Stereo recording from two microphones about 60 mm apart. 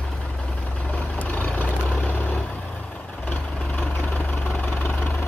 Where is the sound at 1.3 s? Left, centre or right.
Left.